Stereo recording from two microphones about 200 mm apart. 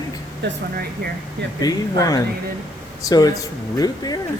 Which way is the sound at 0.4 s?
60° right (ahead or behind).